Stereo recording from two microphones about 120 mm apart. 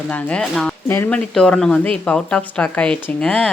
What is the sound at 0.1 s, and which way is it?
Speech, 10° left (ahead or behind).